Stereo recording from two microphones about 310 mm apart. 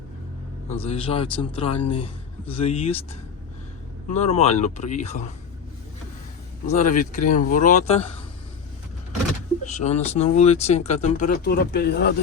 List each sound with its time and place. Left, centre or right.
0.7 s speech: centre
4.1 s speech: left
6.7 s speech: left
9.6 s speech: left